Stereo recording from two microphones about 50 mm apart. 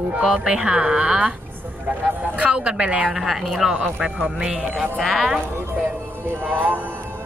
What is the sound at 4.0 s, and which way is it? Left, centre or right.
Speech, centre.